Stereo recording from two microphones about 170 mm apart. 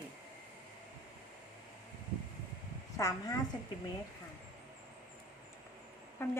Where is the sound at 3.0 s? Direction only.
20° left (ahead or behind).